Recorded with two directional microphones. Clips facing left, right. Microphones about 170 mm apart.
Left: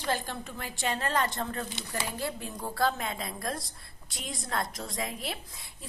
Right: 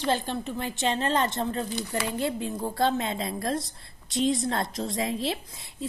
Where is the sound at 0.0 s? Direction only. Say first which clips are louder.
Right 5 dB; 20° right (ahead or behind).